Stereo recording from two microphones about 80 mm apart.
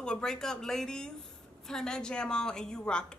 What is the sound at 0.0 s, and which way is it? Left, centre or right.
A woman's voice, centre.